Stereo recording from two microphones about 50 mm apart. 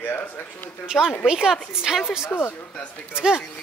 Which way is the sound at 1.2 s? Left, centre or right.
Centre.